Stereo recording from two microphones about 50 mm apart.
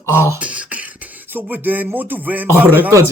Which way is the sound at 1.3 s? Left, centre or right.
Right.